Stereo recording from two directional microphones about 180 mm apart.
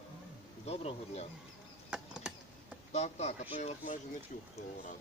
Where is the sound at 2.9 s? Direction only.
40° left (ahead or behind).